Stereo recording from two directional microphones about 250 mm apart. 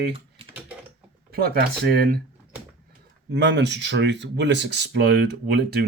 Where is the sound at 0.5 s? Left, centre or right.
Centre.